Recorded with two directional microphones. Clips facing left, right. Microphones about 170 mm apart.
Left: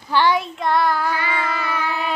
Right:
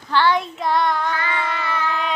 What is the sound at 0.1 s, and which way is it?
Child singing, 15° left (ahead or behind).